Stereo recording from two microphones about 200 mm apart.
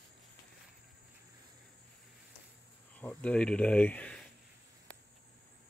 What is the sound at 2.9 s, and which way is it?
Speech, 5° left (ahead or behind).